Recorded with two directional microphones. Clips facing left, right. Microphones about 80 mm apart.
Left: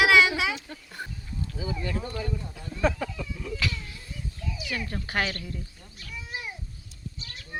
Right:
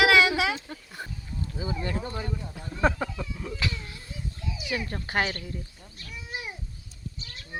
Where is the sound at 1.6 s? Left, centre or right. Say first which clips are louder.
Right 1 dB; right.